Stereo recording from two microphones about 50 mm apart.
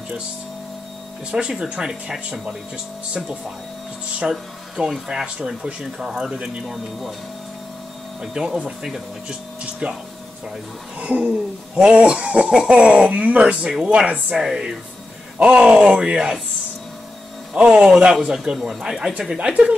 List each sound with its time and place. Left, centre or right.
1.3 s speech: centre
6.7 s speech: centre
8.2 s speech: centre; by 9.9 s right
11.0 s speech: right
17.6 s speech: right
18.1 s speech: centre